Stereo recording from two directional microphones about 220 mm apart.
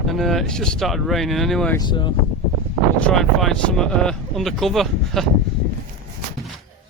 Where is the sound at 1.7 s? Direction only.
20° left (ahead or behind).